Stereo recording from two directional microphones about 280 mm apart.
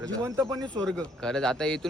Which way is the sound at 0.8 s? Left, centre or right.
Centre.